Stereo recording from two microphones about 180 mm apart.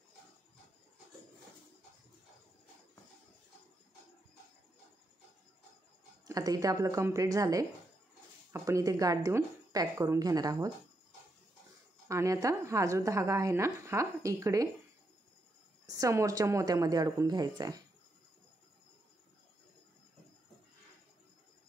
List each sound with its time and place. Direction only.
6.2 s a woman's voice: 20° right (ahead or behind)
12.1 s a woman's voice: 15° right (ahead or behind)
16.0 s a woman's voice: 15° right (ahead or behind)